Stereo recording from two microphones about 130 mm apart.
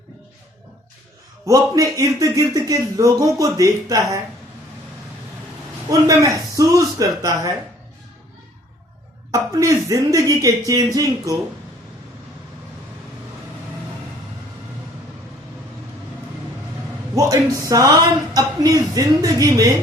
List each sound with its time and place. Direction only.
1.5 s speech: 25° right (ahead or behind)
5.9 s a man's voice: 25° right (ahead or behind)
9.3 s speech: 25° right (ahead or behind)
17.2 s speech: 25° right (ahead or behind)